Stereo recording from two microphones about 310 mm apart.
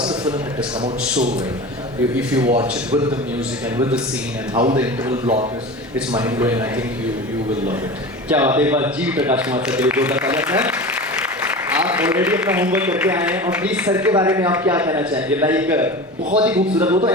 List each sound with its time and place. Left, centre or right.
2.5 s a man's voice: centre
4.5 s a man's voice: centre
6.1 s a man's voice: centre
8.3 s a man's voice: centre